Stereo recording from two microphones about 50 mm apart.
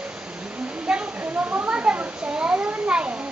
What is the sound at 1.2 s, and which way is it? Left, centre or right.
Children playing, right.